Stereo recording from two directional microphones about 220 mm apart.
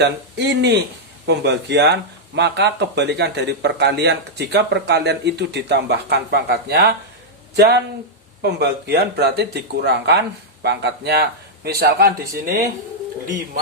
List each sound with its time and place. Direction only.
0.0 s speech: 50° right (ahead or behind)